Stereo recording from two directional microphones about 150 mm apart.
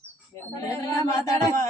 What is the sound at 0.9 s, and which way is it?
Speech, 25° left (ahead or behind).